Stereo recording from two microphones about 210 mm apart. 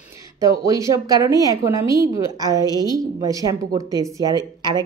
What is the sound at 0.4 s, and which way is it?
A woman's voice, 15° right (ahead or behind).